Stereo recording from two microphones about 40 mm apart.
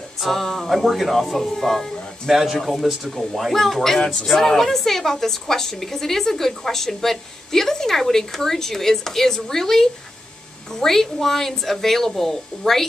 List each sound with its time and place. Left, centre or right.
0.2 s speech: centre
2.2 s a woman's voice: centre
4.0 s speech: left
4.3 s a woman's voice: centre